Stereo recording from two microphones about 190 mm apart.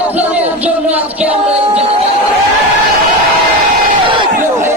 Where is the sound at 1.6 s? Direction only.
30° right (ahead or behind).